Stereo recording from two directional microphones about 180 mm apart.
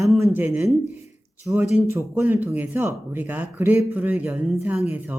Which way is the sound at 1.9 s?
10° right (ahead or behind).